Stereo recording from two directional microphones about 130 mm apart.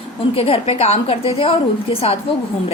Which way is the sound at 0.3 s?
50° left (ahead or behind).